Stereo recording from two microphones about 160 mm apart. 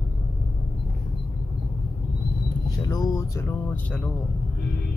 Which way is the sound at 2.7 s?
25° left (ahead or behind).